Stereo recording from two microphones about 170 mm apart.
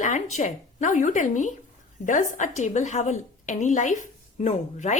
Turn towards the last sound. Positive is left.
turn(degrees=45)  # may be behind; listen again after turning